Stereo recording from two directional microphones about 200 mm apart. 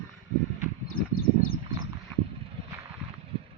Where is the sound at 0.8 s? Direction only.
90° left.